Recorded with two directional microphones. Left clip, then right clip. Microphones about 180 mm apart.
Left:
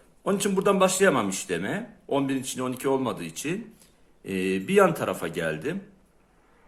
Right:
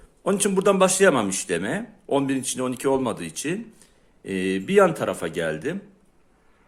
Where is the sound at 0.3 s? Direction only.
30° right (ahead or behind).